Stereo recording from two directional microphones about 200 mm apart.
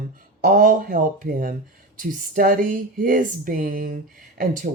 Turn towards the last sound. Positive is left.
turn(degrees=-40)  # may be behind; listen again after turning